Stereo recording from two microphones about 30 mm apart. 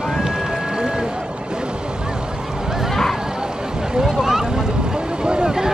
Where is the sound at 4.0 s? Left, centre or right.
Centre.